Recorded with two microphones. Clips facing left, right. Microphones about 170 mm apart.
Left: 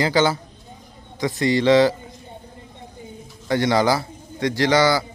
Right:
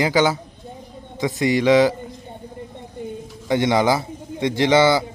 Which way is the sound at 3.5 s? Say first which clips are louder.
Right 1 dB; 20° right (ahead or behind).